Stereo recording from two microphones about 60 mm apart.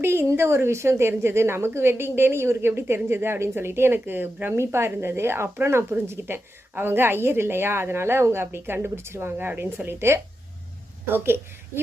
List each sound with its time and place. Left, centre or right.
0.0 s a woman's voice: right
4.5 s a woman's voice: right
9.5 s a woman's voice: right